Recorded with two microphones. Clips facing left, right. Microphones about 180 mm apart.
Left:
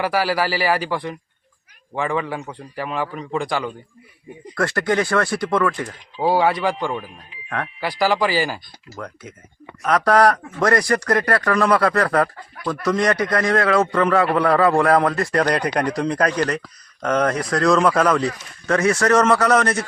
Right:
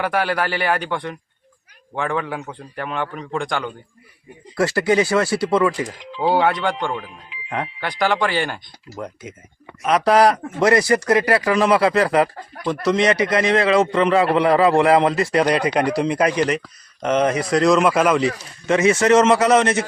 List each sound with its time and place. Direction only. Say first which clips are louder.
0.0 s a man's voice: left 1 dB; centre (ahead or behind); by 5.9 s 15° right (ahead or behind)
6.1 s a man's voice: even; centre (ahead or behind)
7.0 s speech: right 1 dB; 90° right
7.8 s a man's voice: left 1 dB; 5° left (ahead or behind)
9.0 s a man's voice: right 3 dB; 25° right (ahead or behind)
10.6 s speech: right 3 dB; 10° right (ahead or behind)
11.5 s a man's voice: right 1 dB; 20° right (ahead or behind)